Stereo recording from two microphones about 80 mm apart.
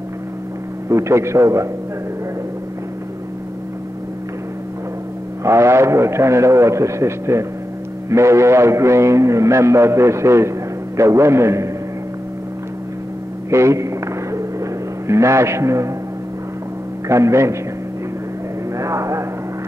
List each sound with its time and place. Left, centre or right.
0.8 s speech: right
5.4 s speech: right
13.5 s a sound: right
17.1 s speech: right
18.8 s vehicle: right